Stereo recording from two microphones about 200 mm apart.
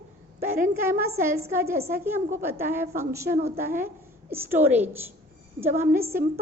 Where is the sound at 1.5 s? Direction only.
15° right (ahead or behind).